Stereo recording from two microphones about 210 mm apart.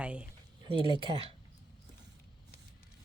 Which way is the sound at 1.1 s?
30° right (ahead or behind).